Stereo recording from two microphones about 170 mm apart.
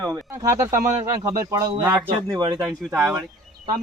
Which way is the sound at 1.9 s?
25° right (ahead or behind).